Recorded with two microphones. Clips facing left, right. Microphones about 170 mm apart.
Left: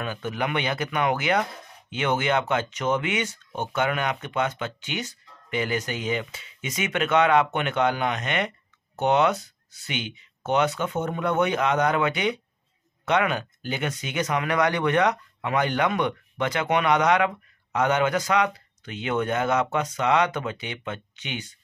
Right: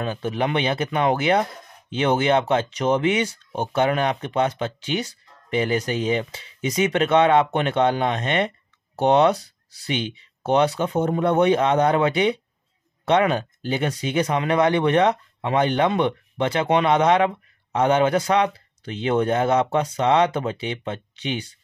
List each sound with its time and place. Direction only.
0.0 s speech: 30° right (ahead or behind)